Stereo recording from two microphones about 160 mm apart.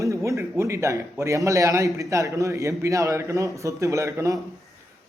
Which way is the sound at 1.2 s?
20° right (ahead or behind).